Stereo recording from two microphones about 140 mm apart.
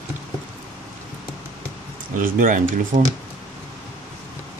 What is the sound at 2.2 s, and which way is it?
Speech, 75° right (ahead or behind).